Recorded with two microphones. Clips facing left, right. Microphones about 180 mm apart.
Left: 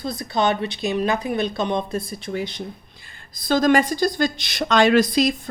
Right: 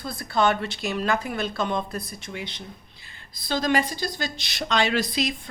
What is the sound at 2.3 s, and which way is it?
A woman's voice, 40° left (ahead or behind).